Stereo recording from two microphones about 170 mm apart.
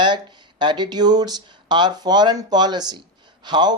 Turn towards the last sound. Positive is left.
turn(degrees=-25)  # may be behind; listen again after turning